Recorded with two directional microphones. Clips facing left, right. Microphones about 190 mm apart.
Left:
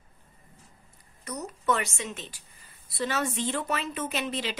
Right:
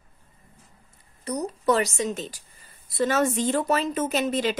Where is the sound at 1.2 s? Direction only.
35° right (ahead or behind).